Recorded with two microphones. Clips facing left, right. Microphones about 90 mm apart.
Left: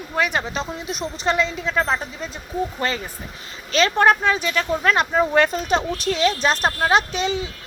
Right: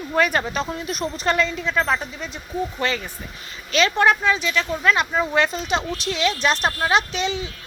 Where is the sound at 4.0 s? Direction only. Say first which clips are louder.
Left 2 dB; 45° left (ahead or behind).